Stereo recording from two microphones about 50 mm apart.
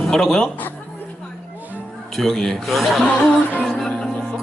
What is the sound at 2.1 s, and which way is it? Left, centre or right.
Speech, centre.